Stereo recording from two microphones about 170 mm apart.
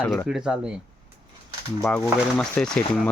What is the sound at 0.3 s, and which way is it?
Speech, 5° right (ahead or behind).